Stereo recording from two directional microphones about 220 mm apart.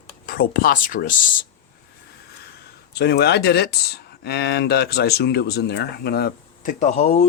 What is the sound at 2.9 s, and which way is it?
Speech, 45° left (ahead or behind).